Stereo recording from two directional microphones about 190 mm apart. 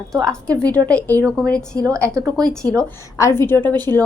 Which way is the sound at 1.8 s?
15° right (ahead or behind).